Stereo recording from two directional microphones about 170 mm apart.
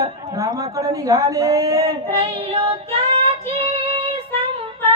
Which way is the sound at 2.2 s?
35° right (ahead or behind).